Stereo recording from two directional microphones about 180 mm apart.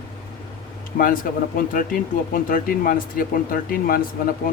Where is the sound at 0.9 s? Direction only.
50° left (ahead or behind).